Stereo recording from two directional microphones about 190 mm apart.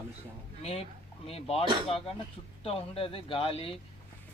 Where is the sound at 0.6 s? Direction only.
30° left (ahead or behind).